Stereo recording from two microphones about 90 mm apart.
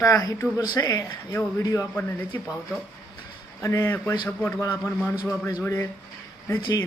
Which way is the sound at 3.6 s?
30° left (ahead or behind).